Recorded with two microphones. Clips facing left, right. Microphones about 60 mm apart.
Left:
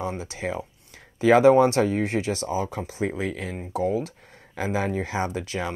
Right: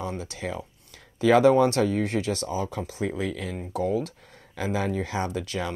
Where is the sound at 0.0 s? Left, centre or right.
Centre.